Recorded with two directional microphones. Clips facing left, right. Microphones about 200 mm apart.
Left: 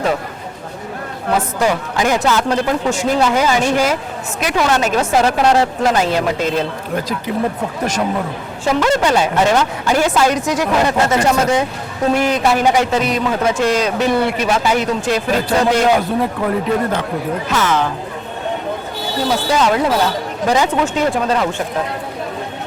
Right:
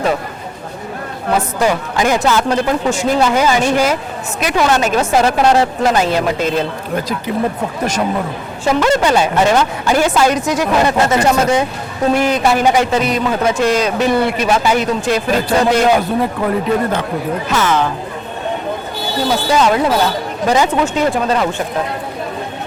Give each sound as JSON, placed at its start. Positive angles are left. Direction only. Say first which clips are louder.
{"t": 1.3, "sound": "speech", "louder": "right 1 dB", "side_deg": -5}
{"t": 4.9, "sound": "speech", "louder": "right 1 dB", "side_deg": -20}
{"t": 10.7, "sound": "speech", "louder": "right 2 dB", "side_deg": -20}
{"t": 11.2, "sound": "speech", "louder": "right 1 dB", "side_deg": -5}
{"t": 18.9, "sound": "speech", "louder": "right 1 dB", "side_deg": -5}